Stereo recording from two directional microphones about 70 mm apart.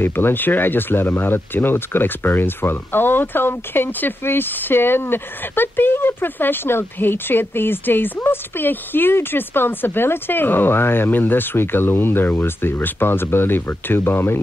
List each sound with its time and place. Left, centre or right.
0.0 s speech: left